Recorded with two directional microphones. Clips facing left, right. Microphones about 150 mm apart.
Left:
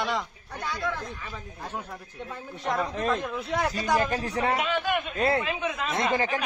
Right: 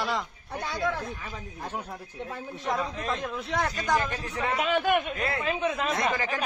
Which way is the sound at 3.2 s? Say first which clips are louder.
Left 1 dB; centre (ahead or behind).